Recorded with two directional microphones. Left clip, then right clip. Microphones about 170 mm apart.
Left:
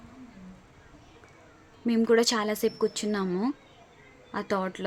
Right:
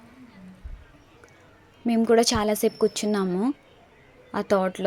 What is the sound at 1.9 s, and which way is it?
A woman's voice, 20° right (ahead or behind).